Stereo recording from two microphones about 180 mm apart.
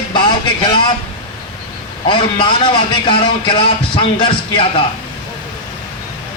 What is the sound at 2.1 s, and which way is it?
A man's voice, 25° left (ahead or behind).